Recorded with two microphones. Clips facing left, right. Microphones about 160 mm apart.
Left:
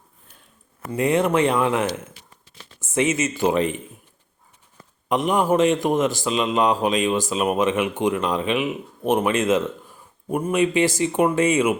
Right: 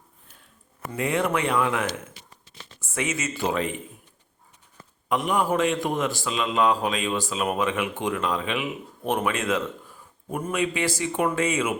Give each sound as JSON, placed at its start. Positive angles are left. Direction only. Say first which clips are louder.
{"t": 0.9, "sound": "a man's voice", "louder": "left 6 dB", "side_deg": 20}
{"t": 5.0, "sound": "a man's voice", "louder": "left 4 dB", "side_deg": 20}